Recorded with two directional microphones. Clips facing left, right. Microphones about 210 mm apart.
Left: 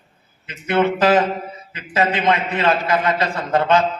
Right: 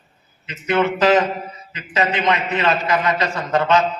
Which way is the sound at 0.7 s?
30° left (ahead or behind).